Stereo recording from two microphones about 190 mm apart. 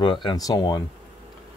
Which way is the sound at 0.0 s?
25° left (ahead or behind).